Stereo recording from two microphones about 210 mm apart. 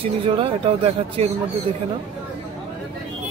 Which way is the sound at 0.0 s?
25° right (ahead or behind).